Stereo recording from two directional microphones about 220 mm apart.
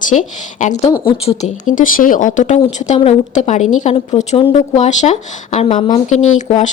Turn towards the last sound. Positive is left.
turn(degrees=35)  # may be behind; listen again after turning